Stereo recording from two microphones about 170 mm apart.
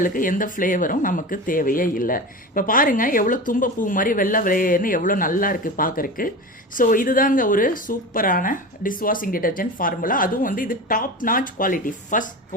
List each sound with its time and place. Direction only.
0.0 s speech: 55° left (ahead or behind)